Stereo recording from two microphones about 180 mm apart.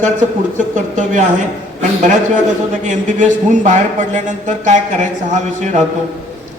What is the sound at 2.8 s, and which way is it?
A man's voice, 45° right (ahead or behind).